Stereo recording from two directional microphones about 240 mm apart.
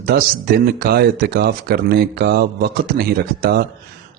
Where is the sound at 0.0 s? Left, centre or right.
Right.